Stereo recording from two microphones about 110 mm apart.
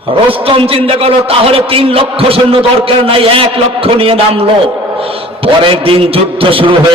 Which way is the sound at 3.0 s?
55° right (ahead or behind).